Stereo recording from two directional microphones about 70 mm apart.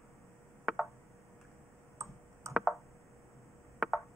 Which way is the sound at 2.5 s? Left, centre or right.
Right.